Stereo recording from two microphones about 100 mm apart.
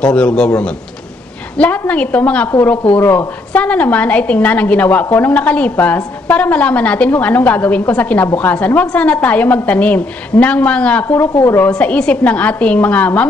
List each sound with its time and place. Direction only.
0.0 s a woman's voice: 10° left (ahead or behind)
1.9 s a woman's voice: 15° left (ahead or behind)
11.7 s a woman's voice: 10° left (ahead or behind)